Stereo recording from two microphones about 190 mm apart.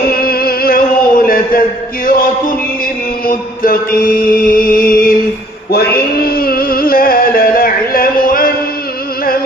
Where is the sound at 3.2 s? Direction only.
50° left (ahead or behind).